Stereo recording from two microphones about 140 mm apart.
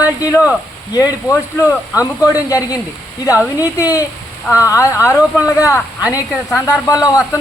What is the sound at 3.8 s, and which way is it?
A man's voice, 25° left (ahead or behind).